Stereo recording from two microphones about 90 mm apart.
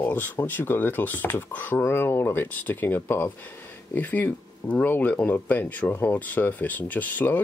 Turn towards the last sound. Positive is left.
turn(degrees=20)  # may be behind; listen again after turning